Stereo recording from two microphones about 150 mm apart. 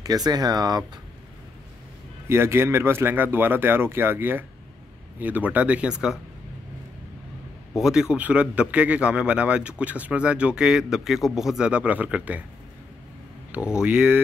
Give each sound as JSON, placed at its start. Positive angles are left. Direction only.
{"t": 0.0, "sound": "speech", "side_deg": -25}
{"t": 2.2, "sound": "a man's voice", "side_deg": -15}
{"t": 7.7, "sound": "a man's voice", "side_deg": -5}
{"t": 13.5, "sound": "a man's voice", "side_deg": -5}